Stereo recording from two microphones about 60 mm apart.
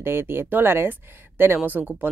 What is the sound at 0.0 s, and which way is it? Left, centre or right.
Speech, right.